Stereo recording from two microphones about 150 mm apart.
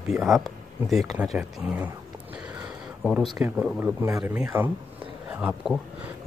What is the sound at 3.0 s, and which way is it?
Speech, centre (ahead or behind).